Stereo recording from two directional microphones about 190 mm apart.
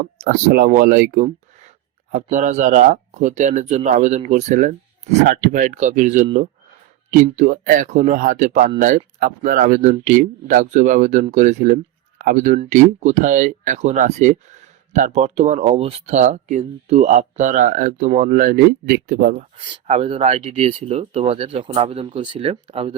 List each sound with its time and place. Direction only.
0.0 s speech: 45° right (ahead or behind)
19.5 s speech: 30° right (ahead or behind)